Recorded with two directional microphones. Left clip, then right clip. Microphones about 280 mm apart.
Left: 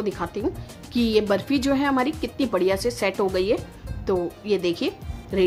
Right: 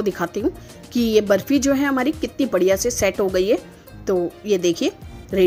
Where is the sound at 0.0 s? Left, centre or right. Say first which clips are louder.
Right 4 dB; centre.